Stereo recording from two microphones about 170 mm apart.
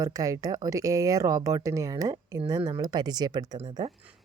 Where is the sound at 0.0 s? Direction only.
20° right (ahead or behind).